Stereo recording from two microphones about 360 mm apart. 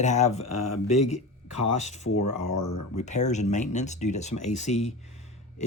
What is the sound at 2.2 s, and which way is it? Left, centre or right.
Speech, left.